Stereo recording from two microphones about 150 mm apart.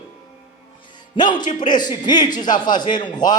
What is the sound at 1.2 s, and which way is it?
A man's voice, 30° left (ahead or behind).